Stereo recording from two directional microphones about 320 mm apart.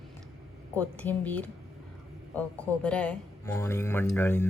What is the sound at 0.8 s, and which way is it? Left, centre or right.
Speech, centre.